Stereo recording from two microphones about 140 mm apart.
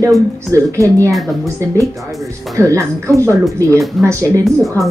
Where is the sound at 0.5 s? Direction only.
20° right (ahead or behind).